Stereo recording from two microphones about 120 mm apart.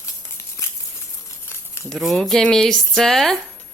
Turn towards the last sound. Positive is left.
turn(degrees=0)  # may be behind; listen again after turning